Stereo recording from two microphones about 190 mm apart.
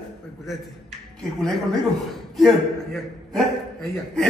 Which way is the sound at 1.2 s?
Centre (ahead or behind).